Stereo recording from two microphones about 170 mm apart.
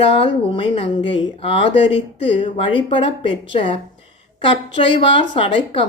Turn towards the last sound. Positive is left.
turn(degrees=30)  # may be behind; listen again after turning